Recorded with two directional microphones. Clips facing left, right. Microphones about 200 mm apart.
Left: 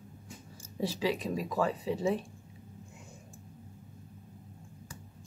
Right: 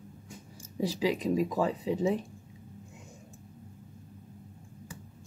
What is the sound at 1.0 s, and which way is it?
Speech, 15° right (ahead or behind).